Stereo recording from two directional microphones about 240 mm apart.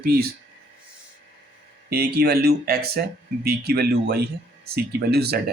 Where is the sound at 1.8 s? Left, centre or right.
Right.